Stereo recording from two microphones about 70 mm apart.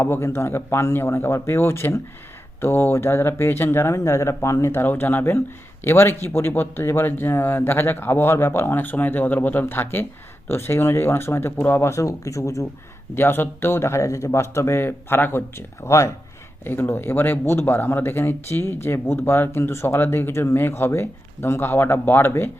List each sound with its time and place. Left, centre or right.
0.0 s speech: left
11.9 s speech: left
13.1 s speech: left
16.6 s speech: left